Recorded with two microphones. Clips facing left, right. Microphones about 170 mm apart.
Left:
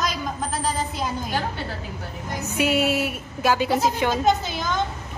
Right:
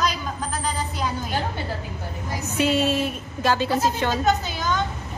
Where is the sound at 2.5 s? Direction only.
10° left (ahead or behind).